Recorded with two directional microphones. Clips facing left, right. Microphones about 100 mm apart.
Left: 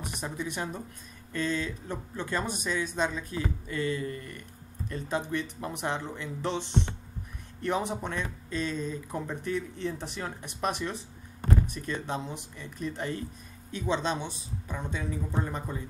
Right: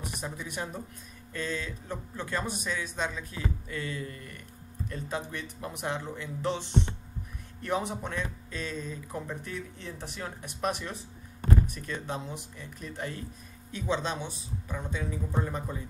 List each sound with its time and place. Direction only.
0.2 s speech: 5° right (ahead or behind)